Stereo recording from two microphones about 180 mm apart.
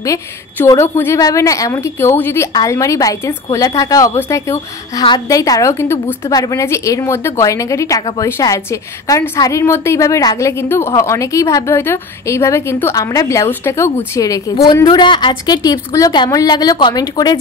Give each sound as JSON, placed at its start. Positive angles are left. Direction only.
{"t": 0.0, "sound": "a woman's voice", "side_deg": 20}